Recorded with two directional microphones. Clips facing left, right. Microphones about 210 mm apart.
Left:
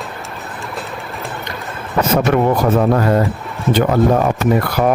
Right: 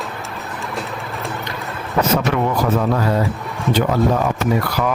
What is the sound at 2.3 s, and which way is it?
Speech, 50° left (ahead or behind).